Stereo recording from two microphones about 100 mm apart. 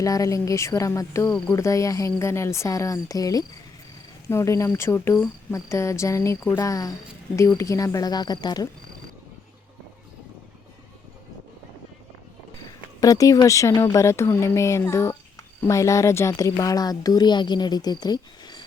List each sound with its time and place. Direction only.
0.0 s speech: 35° left (ahead or behind)
13.0 s speech: 35° left (ahead or behind)